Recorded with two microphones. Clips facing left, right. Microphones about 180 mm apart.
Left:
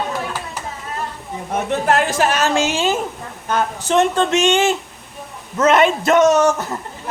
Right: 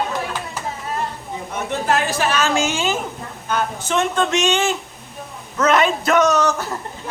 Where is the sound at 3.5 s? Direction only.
35° left (ahead or behind).